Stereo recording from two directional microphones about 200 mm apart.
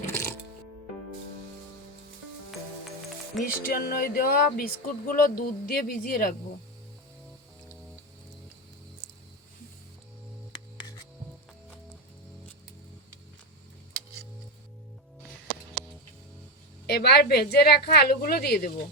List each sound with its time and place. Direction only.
0.0 s music: 10° left (ahead or behind)
3.4 s speech: 45° left (ahead or behind)
16.8 s speech: 55° left (ahead or behind)